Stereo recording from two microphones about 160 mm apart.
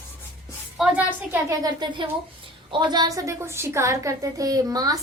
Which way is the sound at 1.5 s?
30° right (ahead or behind).